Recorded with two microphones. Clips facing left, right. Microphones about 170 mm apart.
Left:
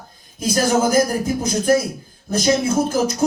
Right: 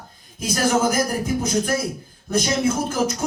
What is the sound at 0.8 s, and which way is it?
Speech, 30° left (ahead or behind).